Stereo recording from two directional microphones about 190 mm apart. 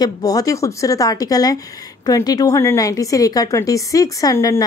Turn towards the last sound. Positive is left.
turn(degrees=15)  # may be behind; listen again after turning